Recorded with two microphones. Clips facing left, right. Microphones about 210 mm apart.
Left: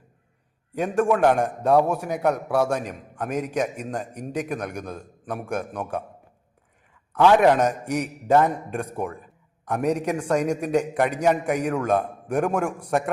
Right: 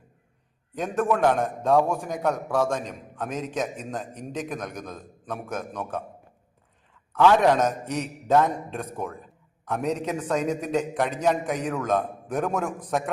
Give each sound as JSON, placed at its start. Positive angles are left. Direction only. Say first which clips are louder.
{"t": 1.2, "sound": "a man's voice", "louder": "left 3 dB", "side_deg": 15}
{"t": 7.1, "sound": "a man's voice", "louder": "left 2 dB", "side_deg": 15}